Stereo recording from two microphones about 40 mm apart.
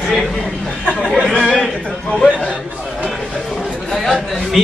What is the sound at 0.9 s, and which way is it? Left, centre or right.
Speech, left.